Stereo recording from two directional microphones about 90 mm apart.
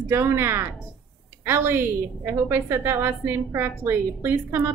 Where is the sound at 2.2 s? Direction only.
25° right (ahead or behind).